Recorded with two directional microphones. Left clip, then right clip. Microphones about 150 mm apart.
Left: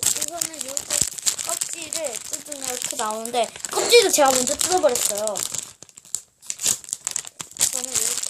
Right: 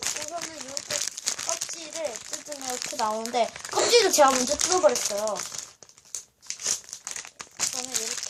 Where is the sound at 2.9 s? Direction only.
45° left (ahead or behind).